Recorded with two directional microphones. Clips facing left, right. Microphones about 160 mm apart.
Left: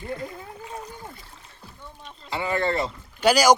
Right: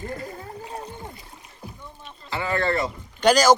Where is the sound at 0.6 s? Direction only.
30° right (ahead or behind).